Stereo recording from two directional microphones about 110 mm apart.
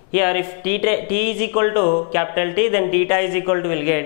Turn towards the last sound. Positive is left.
turn(degrees=10)  # may be behind; listen again after turning